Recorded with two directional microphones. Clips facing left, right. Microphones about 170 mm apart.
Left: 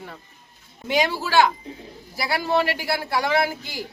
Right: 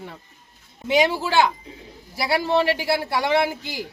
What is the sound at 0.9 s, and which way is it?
Speech, 20° right (ahead or behind).